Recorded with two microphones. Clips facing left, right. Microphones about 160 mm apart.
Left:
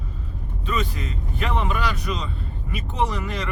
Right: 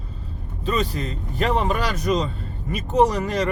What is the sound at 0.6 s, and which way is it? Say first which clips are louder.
Speech: right 4 dB; 35° right (ahead or behind).